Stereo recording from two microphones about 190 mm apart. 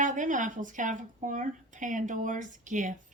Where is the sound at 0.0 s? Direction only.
45° right (ahead or behind).